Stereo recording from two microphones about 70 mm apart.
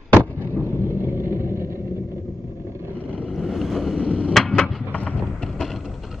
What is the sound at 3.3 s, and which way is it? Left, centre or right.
Boat, centre.